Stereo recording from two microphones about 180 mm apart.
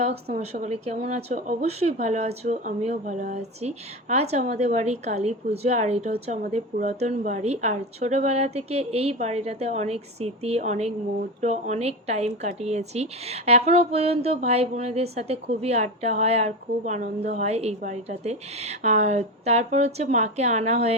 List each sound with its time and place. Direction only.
0.0 s speech: 35° right (ahead or behind)